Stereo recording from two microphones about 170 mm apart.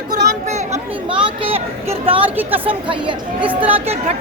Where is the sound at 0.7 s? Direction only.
30° right (ahead or behind).